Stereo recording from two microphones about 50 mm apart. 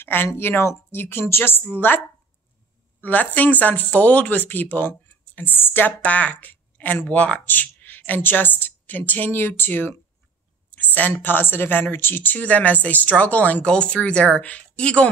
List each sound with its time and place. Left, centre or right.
0.0 s speech: left
0.4 s speech: left
3.0 s speech: left
6.0 s a woman's voice: left
7.3 s speech: left